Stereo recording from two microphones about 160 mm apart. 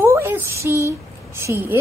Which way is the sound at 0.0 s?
15° right (ahead or behind).